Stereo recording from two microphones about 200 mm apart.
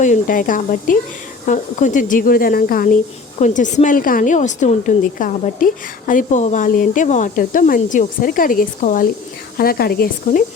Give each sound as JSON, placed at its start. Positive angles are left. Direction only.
{"t": 0.0, "sound": "a woman's voice", "side_deg": 40}